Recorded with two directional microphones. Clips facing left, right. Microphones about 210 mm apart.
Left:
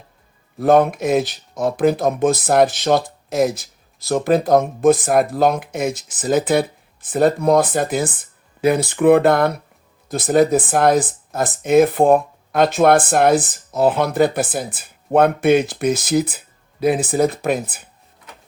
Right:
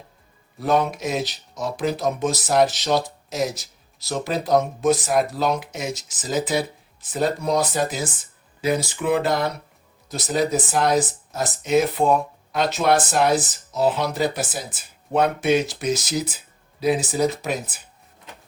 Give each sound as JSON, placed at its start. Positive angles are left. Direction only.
{"t": 0.6, "sound": "speech", "side_deg": 55}